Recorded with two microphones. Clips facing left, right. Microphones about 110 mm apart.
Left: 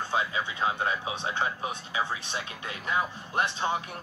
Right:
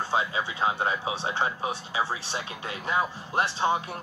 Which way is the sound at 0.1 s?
30° right (ahead or behind).